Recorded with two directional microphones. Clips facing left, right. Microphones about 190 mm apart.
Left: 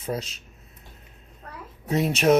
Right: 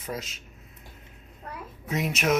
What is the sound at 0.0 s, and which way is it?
Speech, 30° left (ahead or behind).